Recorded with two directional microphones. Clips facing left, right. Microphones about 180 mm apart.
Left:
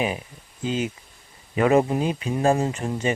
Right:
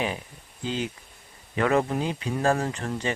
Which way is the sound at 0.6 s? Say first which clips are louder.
Left 4 dB; 20° left (ahead or behind).